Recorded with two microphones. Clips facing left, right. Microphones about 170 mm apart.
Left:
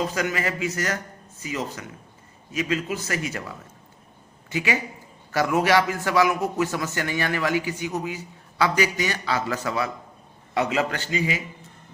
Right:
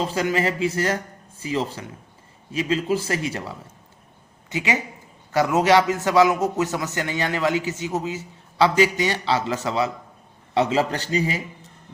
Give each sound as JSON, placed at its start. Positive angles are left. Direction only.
{"t": 0.0, "sound": "a man's voice", "side_deg": -30}